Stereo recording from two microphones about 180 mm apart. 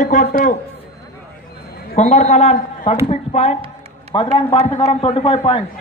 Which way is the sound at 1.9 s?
40° left (ahead or behind).